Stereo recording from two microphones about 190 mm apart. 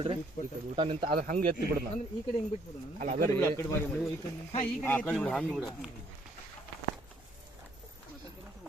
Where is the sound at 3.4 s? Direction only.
15° left (ahead or behind).